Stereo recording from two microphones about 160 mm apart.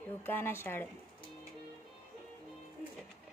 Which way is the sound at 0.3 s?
15° left (ahead or behind).